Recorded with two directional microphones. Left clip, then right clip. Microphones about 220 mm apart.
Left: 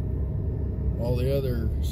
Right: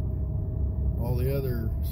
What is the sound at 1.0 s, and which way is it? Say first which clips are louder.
Speech: left 4 dB; 20° right (ahead or behind).